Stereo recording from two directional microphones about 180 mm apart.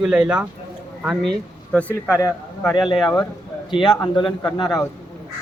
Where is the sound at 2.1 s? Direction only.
15° left (ahead or behind).